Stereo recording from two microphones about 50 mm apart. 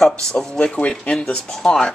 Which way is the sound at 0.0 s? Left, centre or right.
Centre.